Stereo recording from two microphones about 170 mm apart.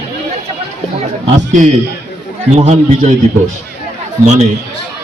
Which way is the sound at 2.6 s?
45° right (ahead or behind).